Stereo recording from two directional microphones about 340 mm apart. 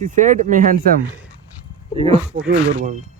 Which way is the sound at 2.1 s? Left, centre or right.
Centre.